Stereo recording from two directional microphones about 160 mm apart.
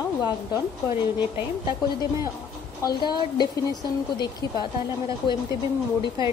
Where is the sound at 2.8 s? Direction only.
25° left (ahead or behind).